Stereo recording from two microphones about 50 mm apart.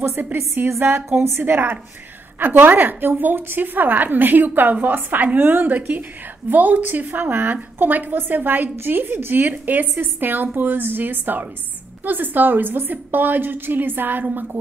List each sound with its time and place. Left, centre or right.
0.6 s a woman's voice: right
1.1 s speech: right
1.4 s a woman's voice: right